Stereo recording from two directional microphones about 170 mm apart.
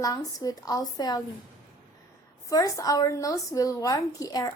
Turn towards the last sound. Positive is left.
turn(degrees=20)  # may be behind; listen again after turning